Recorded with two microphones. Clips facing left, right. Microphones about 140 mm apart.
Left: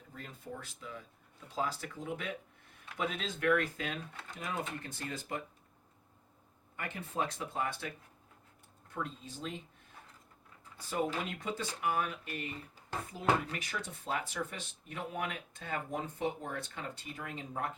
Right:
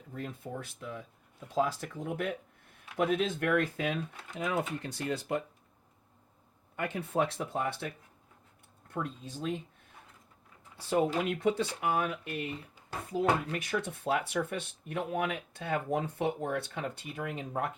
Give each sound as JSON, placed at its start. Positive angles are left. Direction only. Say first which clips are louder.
{"t": 0.1, "sound": "speech", "louder": "right 6 dB", "side_deg": -55}
{"t": 4.4, "sound": "speech", "louder": "right 7 dB", "side_deg": -75}
{"t": 6.7, "sound": "speech", "louder": "right 7 dB", "side_deg": -65}
{"t": 8.9, "sound": "speech", "louder": "right 4 dB", "side_deg": -55}
{"t": 10.8, "sound": "speech", "louder": "right 6 dB", "side_deg": -60}